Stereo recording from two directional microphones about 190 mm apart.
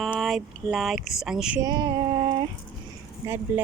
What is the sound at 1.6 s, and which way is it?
Female singing, 20° right (ahead or behind).